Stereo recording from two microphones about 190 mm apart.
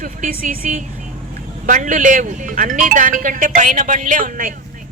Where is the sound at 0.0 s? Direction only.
50° right (ahead or behind).